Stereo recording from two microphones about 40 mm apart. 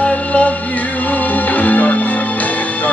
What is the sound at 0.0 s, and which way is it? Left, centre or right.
Music, left.